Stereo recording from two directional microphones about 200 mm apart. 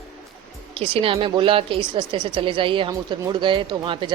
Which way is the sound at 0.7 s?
30° right (ahead or behind).